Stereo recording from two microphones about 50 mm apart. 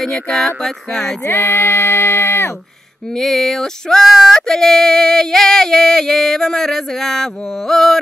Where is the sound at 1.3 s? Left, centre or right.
Left.